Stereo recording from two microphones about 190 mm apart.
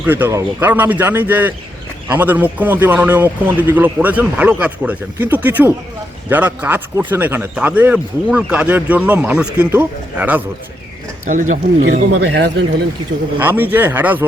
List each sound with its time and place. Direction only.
0.0 s speech: 10° right (ahead or behind)
11.3 s speech: 40° right (ahead or behind)
12.2 s speech: 60° right (ahead or behind)
13.4 s speech: 10° right (ahead or behind)